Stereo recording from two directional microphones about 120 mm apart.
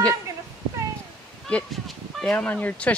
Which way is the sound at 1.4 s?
5° left (ahead or behind).